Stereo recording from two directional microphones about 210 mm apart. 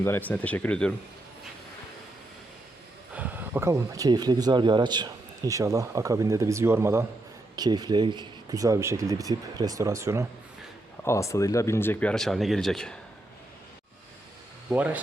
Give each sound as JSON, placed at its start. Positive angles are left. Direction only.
{"t": 0.0, "sound": "speech", "side_deg": 10}
{"t": 3.2, "sound": "a man's voice", "side_deg": -10}
{"t": 11.0, "sound": "speech", "side_deg": 15}
{"t": 14.7, "sound": "a man's voice", "side_deg": -5}